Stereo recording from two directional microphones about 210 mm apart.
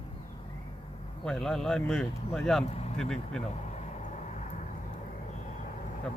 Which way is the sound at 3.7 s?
35° left (ahead or behind).